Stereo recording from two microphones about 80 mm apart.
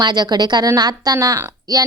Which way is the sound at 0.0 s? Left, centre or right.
Right.